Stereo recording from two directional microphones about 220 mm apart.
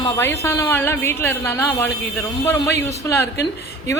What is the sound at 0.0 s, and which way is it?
A woman's voice, 10° left (ahead or behind).